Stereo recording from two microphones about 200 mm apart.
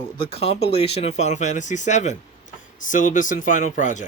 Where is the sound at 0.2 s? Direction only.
30° left (ahead or behind).